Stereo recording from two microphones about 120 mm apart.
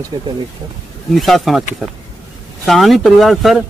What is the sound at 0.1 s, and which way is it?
Speech, 45° right (ahead or behind).